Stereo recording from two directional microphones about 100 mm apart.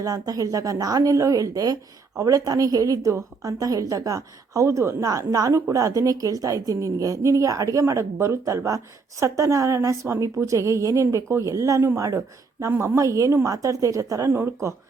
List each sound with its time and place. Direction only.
0.0 s a woman's voice: 35° right (ahead or behind)